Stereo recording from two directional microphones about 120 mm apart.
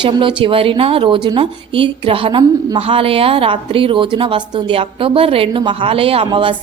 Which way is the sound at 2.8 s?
50° right (ahead or behind).